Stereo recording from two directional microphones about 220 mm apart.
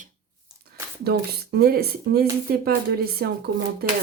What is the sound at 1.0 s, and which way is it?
Speech, 45° right (ahead or behind).